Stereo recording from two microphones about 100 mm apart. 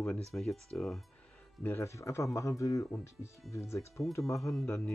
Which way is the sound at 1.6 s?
25° left (ahead or behind).